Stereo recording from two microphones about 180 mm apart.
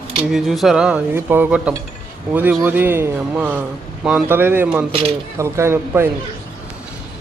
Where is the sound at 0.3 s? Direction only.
Centre (ahead or behind).